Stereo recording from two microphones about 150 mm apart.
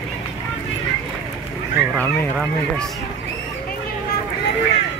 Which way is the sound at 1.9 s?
10° left (ahead or behind).